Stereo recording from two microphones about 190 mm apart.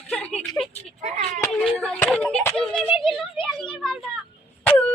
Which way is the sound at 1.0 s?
35° right (ahead or behind).